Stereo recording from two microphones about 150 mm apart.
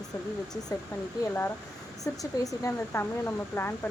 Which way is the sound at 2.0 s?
20° left (ahead or behind).